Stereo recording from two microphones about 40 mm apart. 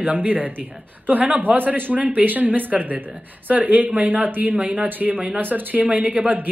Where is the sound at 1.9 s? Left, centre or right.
Right.